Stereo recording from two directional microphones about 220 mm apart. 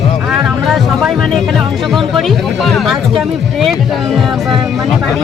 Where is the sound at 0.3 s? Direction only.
Centre (ahead or behind).